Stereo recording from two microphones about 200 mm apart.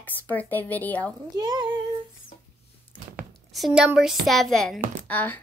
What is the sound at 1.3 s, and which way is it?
Speech, 20° right (ahead or behind).